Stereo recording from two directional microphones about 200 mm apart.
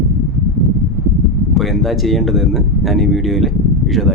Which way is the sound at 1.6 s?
Centre (ahead or behind).